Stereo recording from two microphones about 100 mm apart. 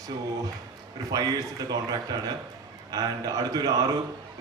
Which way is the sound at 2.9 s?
40° right (ahead or behind).